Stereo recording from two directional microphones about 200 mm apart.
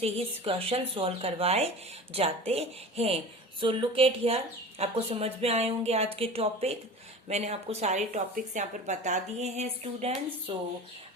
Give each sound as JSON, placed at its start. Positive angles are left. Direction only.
{"t": 0.0, "sound": "speech", "side_deg": -30}